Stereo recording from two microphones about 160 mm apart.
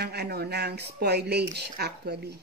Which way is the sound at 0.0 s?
90° right.